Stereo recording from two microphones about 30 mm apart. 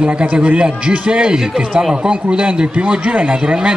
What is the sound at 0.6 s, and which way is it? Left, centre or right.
Speech, right.